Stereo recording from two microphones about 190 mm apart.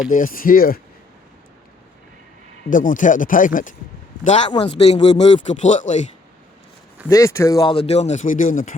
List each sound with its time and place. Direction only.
0.1 s speech: 45° left (ahead or behind)
2.6 s speech: 45° left (ahead or behind)
4.4 s speech: 25° left (ahead or behind)
7.1 s speech: 15° left (ahead or behind); by 8.7 s 40° left (ahead or behind)